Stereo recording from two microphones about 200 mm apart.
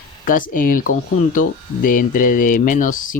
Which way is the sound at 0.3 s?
45° left (ahead or behind).